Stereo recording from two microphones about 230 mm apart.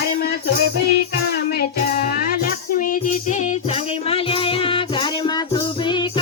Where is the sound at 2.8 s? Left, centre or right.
Left.